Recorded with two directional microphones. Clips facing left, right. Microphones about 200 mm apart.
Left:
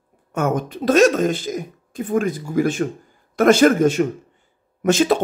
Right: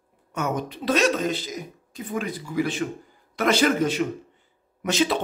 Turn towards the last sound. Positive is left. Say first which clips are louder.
# left 6 dB
turn(degrees=50)  # may be behind; listen again after turning